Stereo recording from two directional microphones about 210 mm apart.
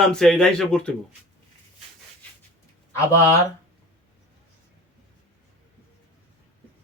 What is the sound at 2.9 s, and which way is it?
Speech, 15° left (ahead or behind).